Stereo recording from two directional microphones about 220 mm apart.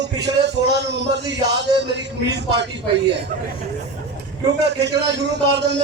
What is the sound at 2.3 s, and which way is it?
Speech, 50° right (ahead or behind).